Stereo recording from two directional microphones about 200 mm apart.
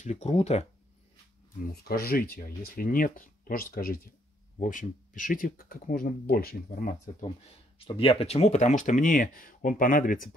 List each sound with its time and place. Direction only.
0.0 s speech: 35° left (ahead or behind)
1.7 s speech: 50° left (ahead or behind)
7.8 s speech: 30° left (ahead or behind)